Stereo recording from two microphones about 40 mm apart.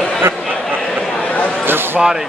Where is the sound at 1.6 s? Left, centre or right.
Right.